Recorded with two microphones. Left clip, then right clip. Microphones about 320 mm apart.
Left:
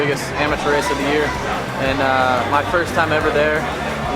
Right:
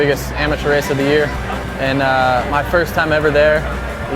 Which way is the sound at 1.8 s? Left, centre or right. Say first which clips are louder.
Right 2 dB; right.